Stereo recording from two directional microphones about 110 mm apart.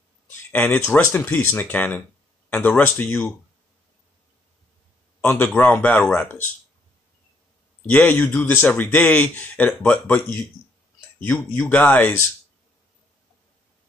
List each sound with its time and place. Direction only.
0.5 s speech: 15° left (ahead or behind)
5.2 s a man's voice: 20° left (ahead or behind)
7.9 s speech: 15° left (ahead or behind)